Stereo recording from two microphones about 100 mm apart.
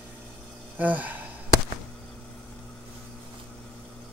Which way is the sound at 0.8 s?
15° right (ahead or behind).